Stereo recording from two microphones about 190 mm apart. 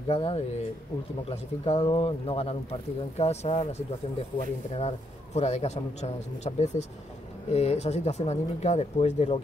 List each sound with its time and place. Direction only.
0.1 s a man's voice: 30° left (ahead or behind)